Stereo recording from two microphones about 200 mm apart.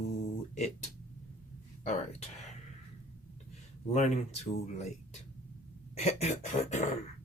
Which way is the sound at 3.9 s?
35° left (ahead or behind).